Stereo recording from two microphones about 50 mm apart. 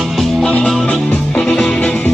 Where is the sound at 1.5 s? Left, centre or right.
Centre.